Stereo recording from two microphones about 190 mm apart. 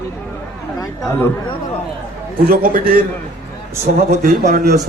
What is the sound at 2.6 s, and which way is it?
Speech, 50° right (ahead or behind).